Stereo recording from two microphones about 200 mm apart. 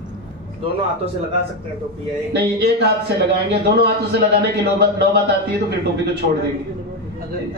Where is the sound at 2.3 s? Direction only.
55° right (ahead or behind).